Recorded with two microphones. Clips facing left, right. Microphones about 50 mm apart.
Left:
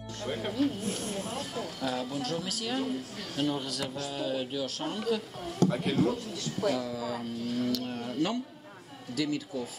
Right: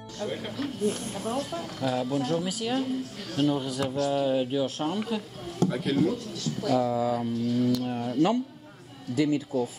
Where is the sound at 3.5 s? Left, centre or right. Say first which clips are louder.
Right 5 dB; centre.